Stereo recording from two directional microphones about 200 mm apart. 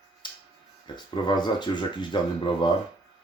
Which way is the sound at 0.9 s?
20° left (ahead or behind).